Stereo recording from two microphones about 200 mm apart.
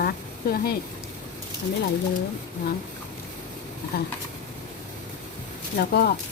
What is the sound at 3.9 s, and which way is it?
Speech, 50° left (ahead or behind).